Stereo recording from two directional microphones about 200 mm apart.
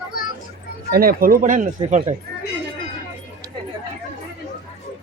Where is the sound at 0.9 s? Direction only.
50° right (ahead or behind).